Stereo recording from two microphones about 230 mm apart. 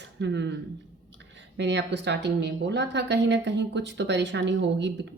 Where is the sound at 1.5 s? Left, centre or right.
Right.